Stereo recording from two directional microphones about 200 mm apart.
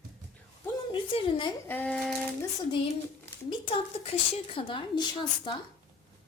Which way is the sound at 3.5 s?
25° left (ahead or behind).